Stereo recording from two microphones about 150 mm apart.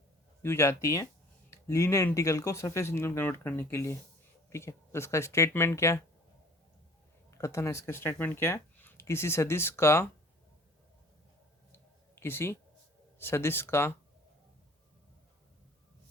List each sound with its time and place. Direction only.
0.4 s speech: 20° left (ahead or behind)
7.3 s speech: 20° left (ahead or behind)
11.7 s a sound: 15° left (ahead or behind)
13.1 s speech: 15° left (ahead or behind)